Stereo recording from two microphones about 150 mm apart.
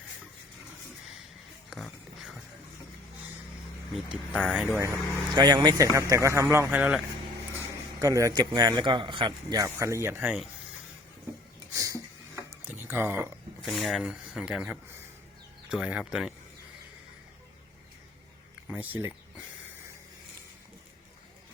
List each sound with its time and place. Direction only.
1.7 s music: centre (ahead or behind)
4.3 s speech: 5° left (ahead or behind)
4.5 s speech: 10° right (ahead or behind)
4.8 s a man's voice: 25° right (ahead or behind); by 7.0 s 10° right (ahead or behind)
7.9 s a man's voice: 20° right (ahead or behind)
11.7 s a sound: 20° right (ahead or behind)
13.6 s speech: centre (ahead or behind)
18.7 s speech: 10° right (ahead or behind)